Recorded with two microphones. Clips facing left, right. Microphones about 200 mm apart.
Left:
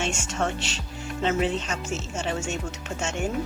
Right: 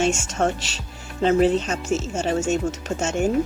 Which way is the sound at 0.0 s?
40° right (ahead or behind).